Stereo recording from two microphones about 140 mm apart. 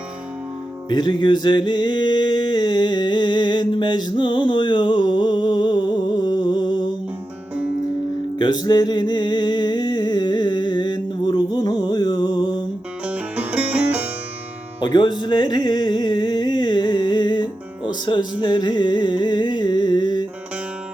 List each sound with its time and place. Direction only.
0.9 s music: 30° left (ahead or behind)
8.4 s music: 30° left (ahead or behind)
13.1 s music: 10° right (ahead or behind)
14.9 s music: 35° left (ahead or behind)